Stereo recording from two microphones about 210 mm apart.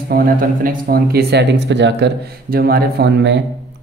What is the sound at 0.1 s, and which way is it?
Speech, 45° right (ahead or behind).